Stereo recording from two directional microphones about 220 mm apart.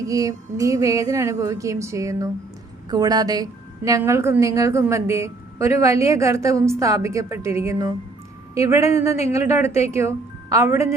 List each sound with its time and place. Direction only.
0.1 s a woman's voice: 15° right (ahead or behind)